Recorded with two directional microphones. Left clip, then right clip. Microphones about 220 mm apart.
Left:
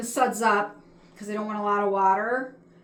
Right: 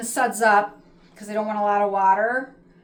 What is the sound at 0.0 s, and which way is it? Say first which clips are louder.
A woman's voice: right 3 dB; 15° right (ahead or behind).